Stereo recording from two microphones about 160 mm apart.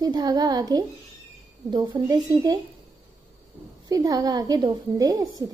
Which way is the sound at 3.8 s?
25° right (ahead or behind).